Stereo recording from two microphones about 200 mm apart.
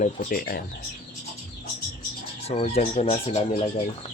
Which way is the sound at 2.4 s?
30° left (ahead or behind).